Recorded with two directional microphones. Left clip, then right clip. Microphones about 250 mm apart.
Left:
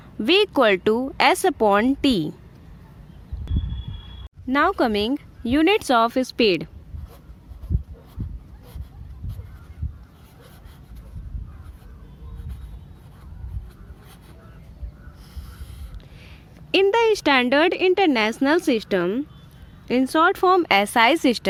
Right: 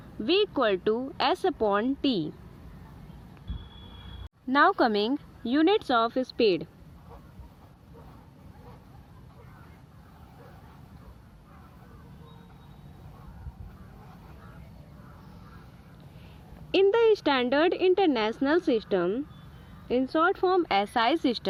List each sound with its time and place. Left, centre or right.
0.2 s speech: left
4.5 s a woman's voice: left
17.2 s a woman's voice: left